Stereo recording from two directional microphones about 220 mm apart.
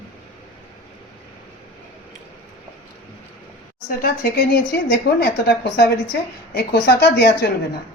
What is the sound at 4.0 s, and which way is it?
A woman's voice, 45° left (ahead or behind).